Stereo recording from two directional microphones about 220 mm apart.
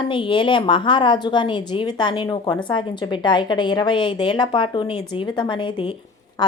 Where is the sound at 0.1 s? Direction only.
20° left (ahead or behind).